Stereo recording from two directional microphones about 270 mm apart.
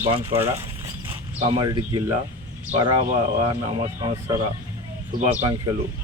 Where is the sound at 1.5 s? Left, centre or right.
Centre.